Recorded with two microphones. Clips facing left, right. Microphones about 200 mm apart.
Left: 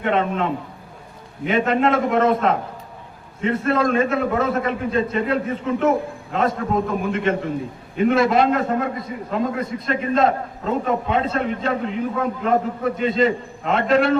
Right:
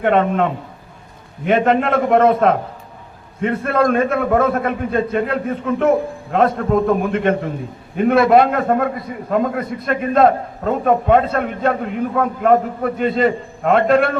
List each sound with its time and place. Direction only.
0.0 s a man's voice: 55° right (ahead or behind)